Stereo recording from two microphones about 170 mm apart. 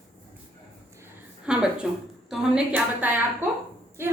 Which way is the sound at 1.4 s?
5° right (ahead or behind).